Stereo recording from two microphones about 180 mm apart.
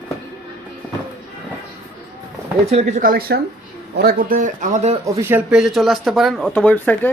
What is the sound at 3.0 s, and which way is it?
Speech, 55° right (ahead or behind).